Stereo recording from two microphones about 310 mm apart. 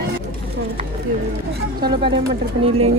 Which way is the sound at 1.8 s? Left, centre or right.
Right.